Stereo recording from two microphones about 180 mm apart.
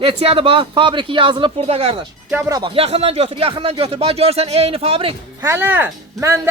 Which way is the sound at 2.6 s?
30° right (ahead or behind).